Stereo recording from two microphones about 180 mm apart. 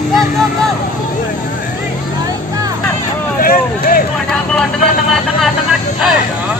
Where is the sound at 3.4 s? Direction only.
55° left (ahead or behind).